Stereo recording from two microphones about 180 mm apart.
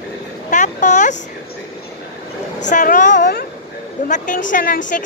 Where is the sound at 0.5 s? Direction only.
45° left (ahead or behind).